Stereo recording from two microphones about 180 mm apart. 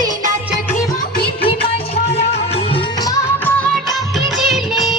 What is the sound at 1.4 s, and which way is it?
Music, 30° left (ahead or behind).